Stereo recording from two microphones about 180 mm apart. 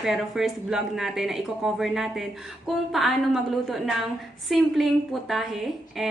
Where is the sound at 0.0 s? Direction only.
Centre (ahead or behind).